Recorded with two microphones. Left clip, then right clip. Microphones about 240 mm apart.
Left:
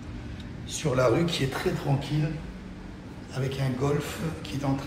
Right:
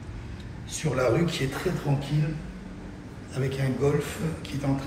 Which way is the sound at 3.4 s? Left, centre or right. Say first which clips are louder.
Right 3 dB; centre.